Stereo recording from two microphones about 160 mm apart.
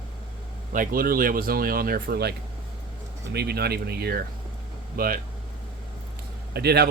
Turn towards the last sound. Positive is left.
turn(degrees=-90)